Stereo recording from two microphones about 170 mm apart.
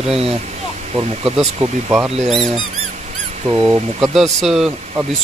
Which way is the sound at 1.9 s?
5° right (ahead or behind).